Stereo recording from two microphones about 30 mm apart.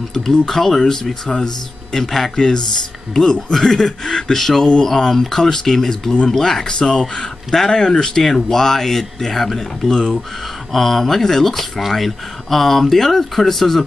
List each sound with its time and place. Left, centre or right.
0.1 s speech: centre
8.2 s speech: centre
10.7 s speech: centre